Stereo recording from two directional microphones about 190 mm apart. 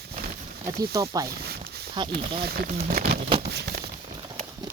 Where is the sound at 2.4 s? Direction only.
50° right (ahead or behind).